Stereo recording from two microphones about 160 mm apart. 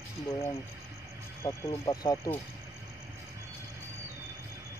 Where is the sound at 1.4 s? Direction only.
25° left (ahead or behind).